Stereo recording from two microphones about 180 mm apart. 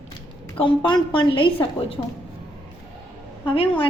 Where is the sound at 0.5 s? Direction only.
30° left (ahead or behind).